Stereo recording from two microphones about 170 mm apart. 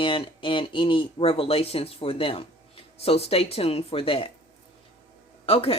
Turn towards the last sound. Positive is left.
turn(degrees=35)  # may be behind; listen again after turning